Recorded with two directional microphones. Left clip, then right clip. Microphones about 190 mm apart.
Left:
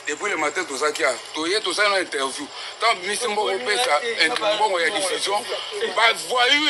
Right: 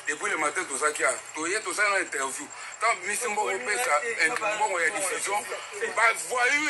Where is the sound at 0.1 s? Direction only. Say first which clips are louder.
Left 4 dB; 35° left (ahead or behind).